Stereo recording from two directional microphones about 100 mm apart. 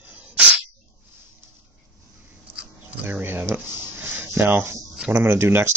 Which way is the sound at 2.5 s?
15° right (ahead or behind).